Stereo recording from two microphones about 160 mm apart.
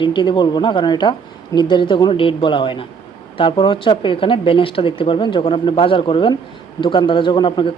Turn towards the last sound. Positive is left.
turn(degrees=30)  # may be behind; listen again after turning